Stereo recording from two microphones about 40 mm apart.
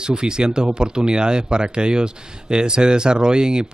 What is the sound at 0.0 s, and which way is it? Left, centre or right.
Speech, centre.